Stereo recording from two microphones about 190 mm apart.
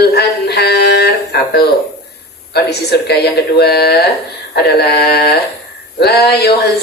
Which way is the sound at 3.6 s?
55° left (ahead or behind).